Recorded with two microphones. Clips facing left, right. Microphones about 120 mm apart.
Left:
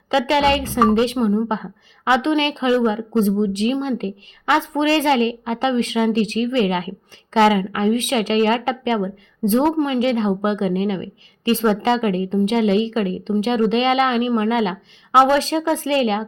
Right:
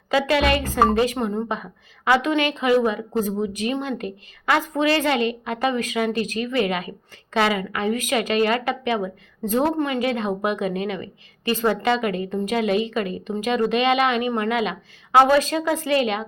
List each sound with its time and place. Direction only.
0.1 s a woman's voice: 25° left (ahead or behind)